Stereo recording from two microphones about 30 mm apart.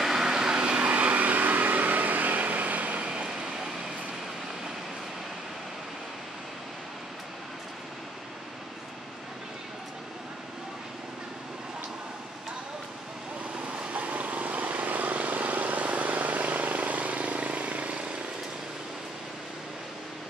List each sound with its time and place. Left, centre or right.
0.0 s vehicle: centre
0.3 s vehicle: right
0.7 s vehicle: right
3.1 s a sound: right
13.9 s vehicle: right